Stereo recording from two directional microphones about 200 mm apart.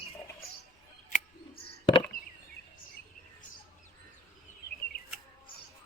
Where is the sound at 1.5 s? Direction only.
25° left (ahead or behind).